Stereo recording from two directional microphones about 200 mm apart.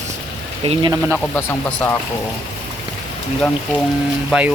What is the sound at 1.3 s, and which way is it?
Speech, 10° left (ahead or behind).